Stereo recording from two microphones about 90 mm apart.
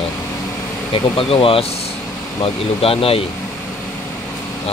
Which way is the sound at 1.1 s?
90° left.